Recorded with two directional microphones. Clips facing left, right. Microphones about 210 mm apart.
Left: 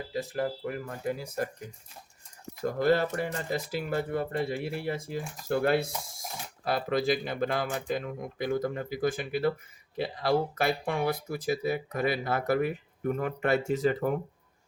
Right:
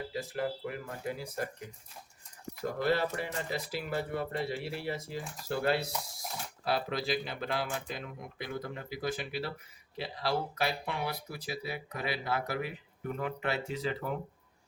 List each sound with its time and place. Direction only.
0.1 s speech: 45° left (ahead or behind)
2.6 s speech: 45° left (ahead or behind)